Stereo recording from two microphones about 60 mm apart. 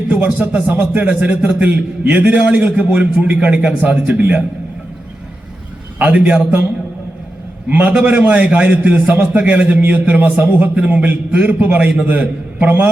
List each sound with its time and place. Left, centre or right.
0.3 s speech: centre
0.7 s a man's voice: right
6.0 s a man's voice: right
7.7 s a man's voice: right